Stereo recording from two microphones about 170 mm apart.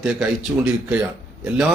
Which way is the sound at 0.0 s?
5° right (ahead or behind).